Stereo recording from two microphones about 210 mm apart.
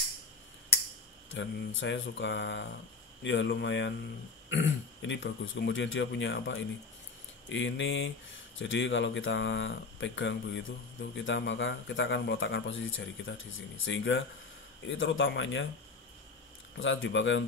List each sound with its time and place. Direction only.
1.3 s a man's voice: 60° left (ahead or behind)
16.7 s a man's voice: 65° left (ahead or behind)